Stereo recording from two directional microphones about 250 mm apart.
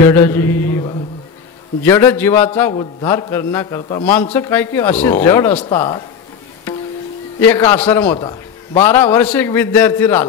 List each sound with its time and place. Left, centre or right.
0.0 s a man's voice: centre
7.3 s a man's voice: centre
8.2 s a man's voice: centre
8.9 s a man's voice: centre